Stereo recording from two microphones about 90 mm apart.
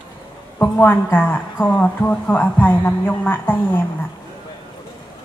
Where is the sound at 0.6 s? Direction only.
25° left (ahead or behind).